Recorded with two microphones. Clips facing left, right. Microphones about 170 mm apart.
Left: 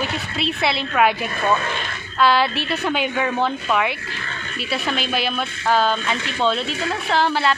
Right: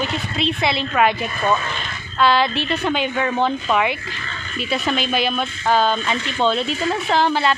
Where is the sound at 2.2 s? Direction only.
10° left (ahead or behind).